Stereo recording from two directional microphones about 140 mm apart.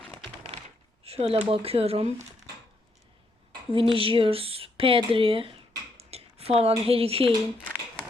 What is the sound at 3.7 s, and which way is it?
Speech, 40° right (ahead or behind).